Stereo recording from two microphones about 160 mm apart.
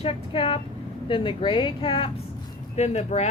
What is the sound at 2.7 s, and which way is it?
Speech, 45° left (ahead or behind).